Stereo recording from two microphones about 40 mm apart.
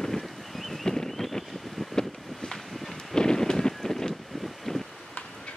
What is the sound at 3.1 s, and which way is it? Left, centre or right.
Wind noise, centre.